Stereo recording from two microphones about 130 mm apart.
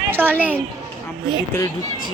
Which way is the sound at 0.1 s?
15° right (ahead or behind).